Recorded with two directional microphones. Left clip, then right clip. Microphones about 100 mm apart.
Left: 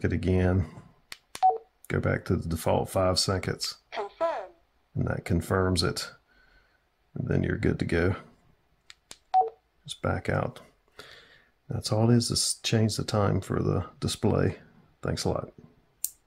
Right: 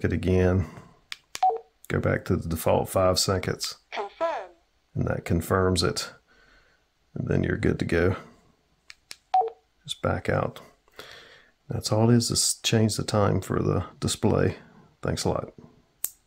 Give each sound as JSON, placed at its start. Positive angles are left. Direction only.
{"t": 0.0, "sound": "telephone dialing", "side_deg": -30}
{"t": 1.8, "sound": "speech", "side_deg": -25}
{"t": 3.9, "sound": "a sound", "side_deg": -10}
{"t": 4.9, "sound": "speech", "side_deg": -25}
{"t": 7.2, "sound": "speech", "side_deg": -30}
{"t": 8.8, "sound": "telephone dialing", "side_deg": -15}
{"t": 9.9, "sound": "speech", "side_deg": -25}